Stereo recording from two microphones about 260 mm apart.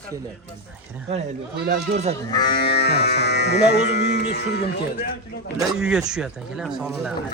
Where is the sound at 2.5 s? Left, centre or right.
Left.